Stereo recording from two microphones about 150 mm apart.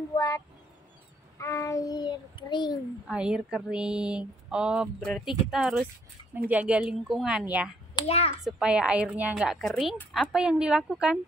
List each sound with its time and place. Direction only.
0.1 s a sound: 25° left (ahead or behind)
1.4 s a child's voice: 20° left (ahead or behind)
3.1 s speech: 5° right (ahead or behind)
8.0 s a child's voice: 30° left (ahead or behind)
8.5 s speech: 5° right (ahead or behind)